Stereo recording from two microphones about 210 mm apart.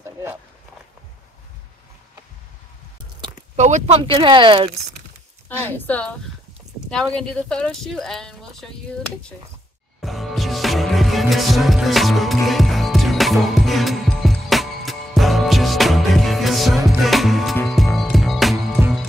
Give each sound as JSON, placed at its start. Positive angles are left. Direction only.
{"t": 3.5, "sound": "speech", "side_deg": -35}
{"t": 5.6, "sound": "speech", "side_deg": 10}
{"t": 10.0, "sound": "music", "side_deg": 0}